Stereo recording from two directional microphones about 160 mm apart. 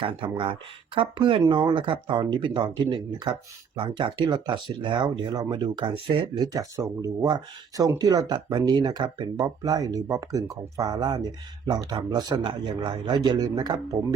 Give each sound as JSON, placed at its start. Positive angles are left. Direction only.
{"t": 0.0, "sound": "speech", "side_deg": -35}